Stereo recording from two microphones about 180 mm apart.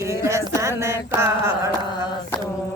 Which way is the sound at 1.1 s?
15° right (ahead or behind).